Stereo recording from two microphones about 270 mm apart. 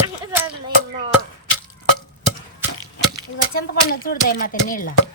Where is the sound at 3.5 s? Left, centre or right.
Left.